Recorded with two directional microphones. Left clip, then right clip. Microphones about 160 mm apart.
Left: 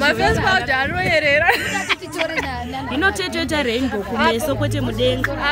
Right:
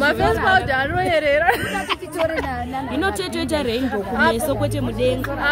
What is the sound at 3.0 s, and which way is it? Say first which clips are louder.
Speech: left 4 dB; 5° left (ahead or behind).